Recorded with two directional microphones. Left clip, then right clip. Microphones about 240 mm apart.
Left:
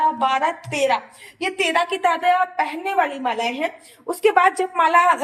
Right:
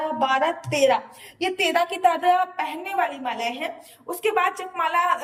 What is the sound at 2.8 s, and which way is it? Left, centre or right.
A woman's voice, left.